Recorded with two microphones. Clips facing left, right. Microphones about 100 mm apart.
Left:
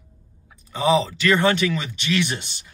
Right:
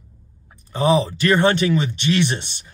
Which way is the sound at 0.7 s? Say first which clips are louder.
Right 2 dB; 40° right (ahead or behind).